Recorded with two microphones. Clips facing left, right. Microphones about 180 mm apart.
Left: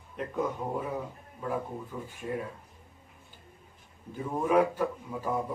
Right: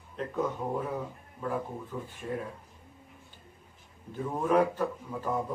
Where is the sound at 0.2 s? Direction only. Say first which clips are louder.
Even; 10° left (ahead or behind).